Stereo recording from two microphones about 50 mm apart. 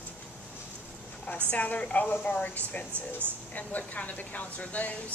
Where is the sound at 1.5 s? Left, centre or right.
Left.